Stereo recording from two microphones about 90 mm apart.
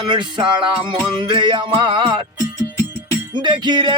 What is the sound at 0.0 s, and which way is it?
Music, 60° right (ahead or behind).